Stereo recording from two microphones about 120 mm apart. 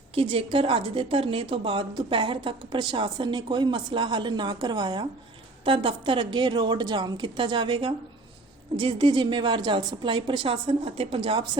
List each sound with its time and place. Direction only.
0.1 s a woman's voice: 50° right (ahead or behind)